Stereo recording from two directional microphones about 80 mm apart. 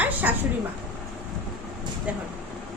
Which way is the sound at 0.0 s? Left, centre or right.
Right.